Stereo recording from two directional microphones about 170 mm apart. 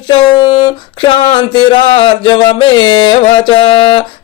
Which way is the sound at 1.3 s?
25° left (ahead or behind).